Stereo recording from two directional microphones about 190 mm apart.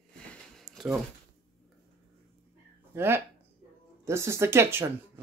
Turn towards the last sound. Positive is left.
turn(degrees=-15)  # may be behind; listen again after turning